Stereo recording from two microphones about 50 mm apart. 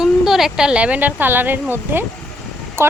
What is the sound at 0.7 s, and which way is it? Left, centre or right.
Speech, right.